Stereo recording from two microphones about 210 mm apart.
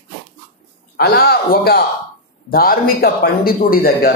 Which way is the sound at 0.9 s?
50° left (ahead or behind).